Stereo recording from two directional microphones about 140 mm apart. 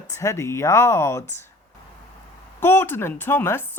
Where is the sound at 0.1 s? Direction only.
20° left (ahead or behind).